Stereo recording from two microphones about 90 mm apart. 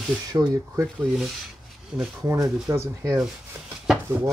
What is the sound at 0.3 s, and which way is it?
Speech, 40° right (ahead or behind).